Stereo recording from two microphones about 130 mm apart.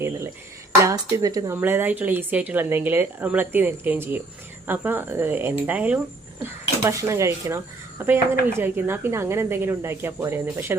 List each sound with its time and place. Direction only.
0.8 s speech: 25° right (ahead or behind)
1.5 s speech: 15° right (ahead or behind)
6.4 s speech: 25° right (ahead or behind)